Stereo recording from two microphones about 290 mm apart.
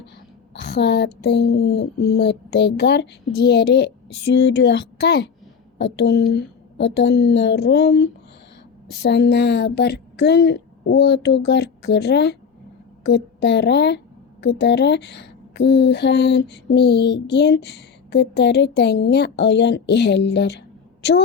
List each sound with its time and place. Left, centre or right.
0.5 s speech: left